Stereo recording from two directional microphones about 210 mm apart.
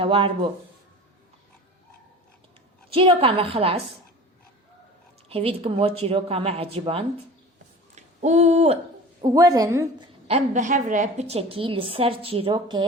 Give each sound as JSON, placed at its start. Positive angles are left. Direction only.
{"t": 0.0, "sound": "a woman's voice", "side_deg": -25}
{"t": 2.9, "sound": "a woman's voice", "side_deg": -25}
{"t": 5.3, "sound": "a woman's voice", "side_deg": -25}
{"t": 7.9, "sound": "a sound", "side_deg": -35}
{"t": 9.2, "sound": "a woman's voice", "side_deg": -15}
{"t": 10.2, "sound": "a woman's voice", "side_deg": -35}